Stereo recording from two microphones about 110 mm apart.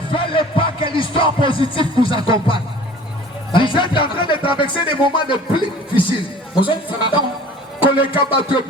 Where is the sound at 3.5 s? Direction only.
45° left (ahead or behind).